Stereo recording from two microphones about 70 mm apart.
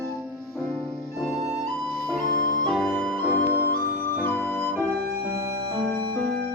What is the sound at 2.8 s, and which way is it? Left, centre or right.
Music, left.